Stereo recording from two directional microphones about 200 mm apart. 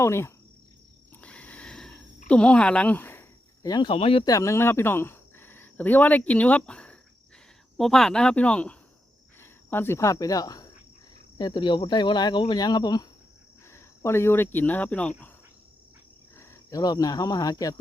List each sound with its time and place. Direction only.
0.0 s speech: 15° left (ahead or behind)
1.2 s a sound: 5° left (ahead or behind); by 4.2 s 30° left (ahead or behind)
4.3 s speech: 15° left (ahead or behind)
16.4 s speech: 15° left (ahead or behind)